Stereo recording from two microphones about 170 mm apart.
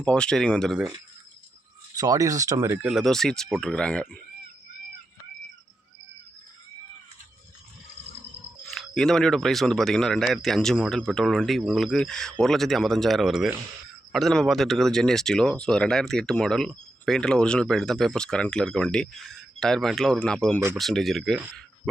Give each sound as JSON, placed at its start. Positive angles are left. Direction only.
{"t": 0.0, "sound": "speech", "side_deg": 5}
{"t": 2.0, "sound": "speech", "side_deg": -20}
{"t": 2.9, "sound": "speech", "side_deg": 0}
{"t": 8.7, "sound": "speech", "side_deg": 0}